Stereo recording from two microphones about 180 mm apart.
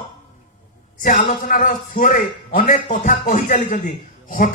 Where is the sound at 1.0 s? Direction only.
50° left (ahead or behind).